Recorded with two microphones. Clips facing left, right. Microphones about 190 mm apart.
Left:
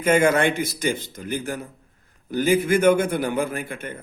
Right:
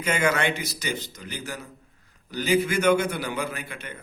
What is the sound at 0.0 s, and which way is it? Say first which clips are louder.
A man's voice: left 6 dB; 50° left (ahead or behind).